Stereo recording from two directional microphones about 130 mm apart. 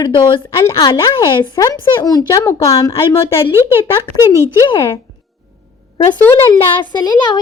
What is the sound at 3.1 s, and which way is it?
Speech, 20° left (ahead or behind).